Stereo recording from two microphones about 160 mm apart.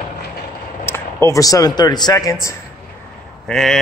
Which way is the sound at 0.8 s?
15° left (ahead or behind).